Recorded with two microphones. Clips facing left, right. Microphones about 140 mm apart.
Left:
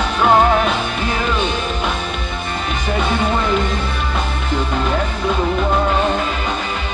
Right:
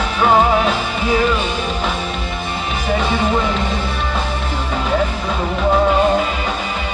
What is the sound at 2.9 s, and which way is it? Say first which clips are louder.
Music: right 1 dB; centre (ahead or behind).